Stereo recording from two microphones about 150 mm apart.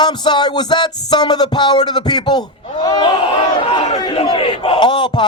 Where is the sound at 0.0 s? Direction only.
30° left (ahead or behind).